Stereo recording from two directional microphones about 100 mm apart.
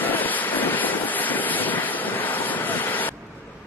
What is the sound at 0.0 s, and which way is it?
Vehicle, 15° left (ahead or behind).